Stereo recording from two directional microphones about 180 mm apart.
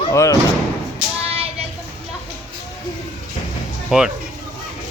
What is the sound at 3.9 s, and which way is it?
Speech, 5° right (ahead or behind).